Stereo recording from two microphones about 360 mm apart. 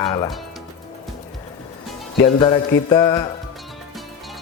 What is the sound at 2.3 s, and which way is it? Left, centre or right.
Speech, centre.